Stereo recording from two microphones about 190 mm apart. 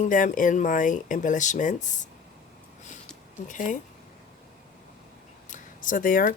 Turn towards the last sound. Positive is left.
turn(degrees=45)  # may be behind; listen again after turning